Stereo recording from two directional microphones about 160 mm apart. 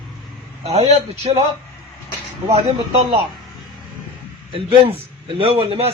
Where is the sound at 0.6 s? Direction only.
40° right (ahead or behind).